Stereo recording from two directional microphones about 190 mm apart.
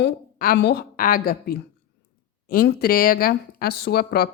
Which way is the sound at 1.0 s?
45° left (ahead or behind).